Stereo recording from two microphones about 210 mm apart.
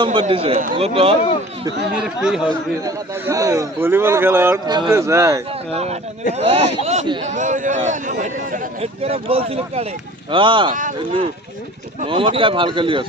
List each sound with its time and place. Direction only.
0.0 s speech: 25° right (ahead or behind)
2.0 s speech: 5° right (ahead or behind)
2.8 s speech: 15° right (ahead or behind)
5.7 s speech: 30° right (ahead or behind)
10.7 s speech: 40° right (ahead or behind)
11.9 s speech: 25° right (ahead or behind)